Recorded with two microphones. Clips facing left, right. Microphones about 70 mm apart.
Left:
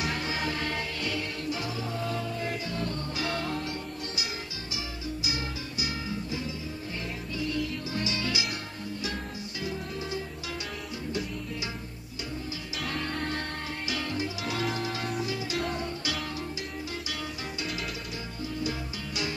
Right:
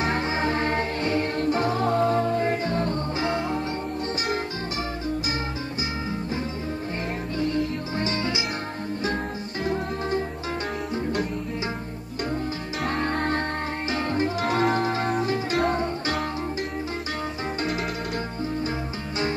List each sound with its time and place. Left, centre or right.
0.0 s music: right
7.3 s music: right
9.7 s music: right
12.8 s music: right